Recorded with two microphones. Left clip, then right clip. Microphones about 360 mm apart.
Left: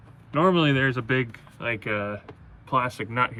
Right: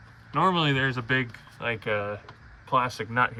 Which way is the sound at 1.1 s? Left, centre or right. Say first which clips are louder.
Left 1 dB; left.